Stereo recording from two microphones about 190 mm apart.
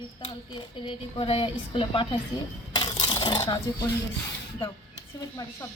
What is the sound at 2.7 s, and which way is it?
Coin, 25° left (ahead or behind).